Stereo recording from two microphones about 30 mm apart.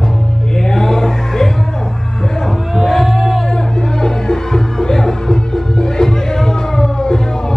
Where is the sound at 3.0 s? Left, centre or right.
Centre.